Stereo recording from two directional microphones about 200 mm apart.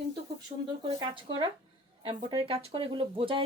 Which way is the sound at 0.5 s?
35° right (ahead or behind).